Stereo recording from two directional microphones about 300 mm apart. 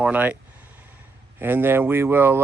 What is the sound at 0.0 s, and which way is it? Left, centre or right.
Speech, centre.